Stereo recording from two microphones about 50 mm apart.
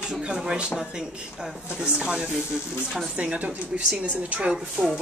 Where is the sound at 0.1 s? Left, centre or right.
Centre.